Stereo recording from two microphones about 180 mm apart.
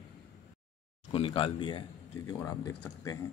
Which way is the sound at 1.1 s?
30° left (ahead or behind).